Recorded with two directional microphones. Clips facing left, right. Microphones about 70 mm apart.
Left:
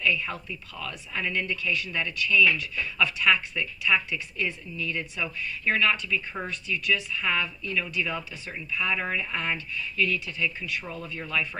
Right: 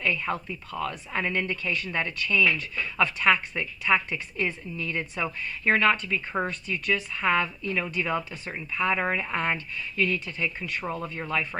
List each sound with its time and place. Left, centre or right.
0.0 s a woman's voice: right